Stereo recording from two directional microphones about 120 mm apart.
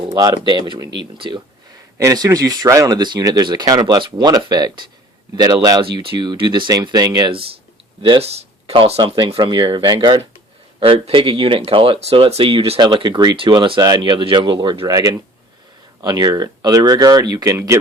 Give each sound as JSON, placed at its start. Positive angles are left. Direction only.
{"t": 0.0, "sound": "speech", "side_deg": -35}
{"t": 2.0, "sound": "speech", "side_deg": -30}
{"t": 5.8, "sound": "speech", "side_deg": -45}
{"t": 8.2, "sound": "speech", "side_deg": -55}
{"t": 12.8, "sound": "speech", "side_deg": -40}